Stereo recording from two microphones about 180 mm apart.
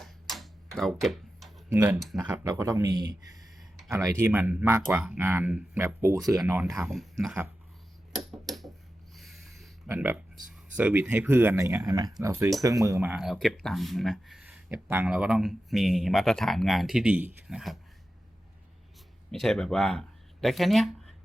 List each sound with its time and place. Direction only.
0.0 s a sound: centre (ahead or behind)
1.7 s speech: 10° right (ahead or behind)
6.2 s speech: centre (ahead or behind)
8.1 s a sound: centre (ahead or behind)
9.9 s speech: 10° right (ahead or behind)
13.2 s speech: centre (ahead or behind)
19.3 s speech: centre (ahead or behind)